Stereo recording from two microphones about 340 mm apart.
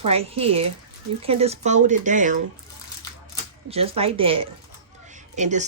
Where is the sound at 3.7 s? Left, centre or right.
Centre.